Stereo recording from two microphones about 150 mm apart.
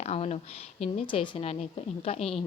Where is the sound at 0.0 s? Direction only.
45° left (ahead or behind).